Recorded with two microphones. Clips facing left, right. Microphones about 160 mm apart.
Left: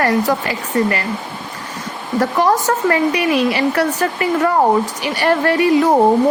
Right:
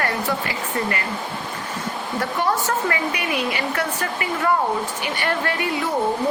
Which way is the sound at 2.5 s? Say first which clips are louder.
Left 7 dB; 40° left (ahead or behind).